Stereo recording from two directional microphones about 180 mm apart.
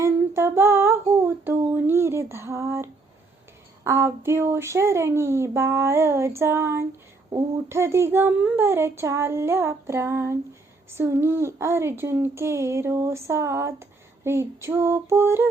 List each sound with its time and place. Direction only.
0.0 s female singing: 15° right (ahead or behind)
3.8 s speech: 15° right (ahead or behind)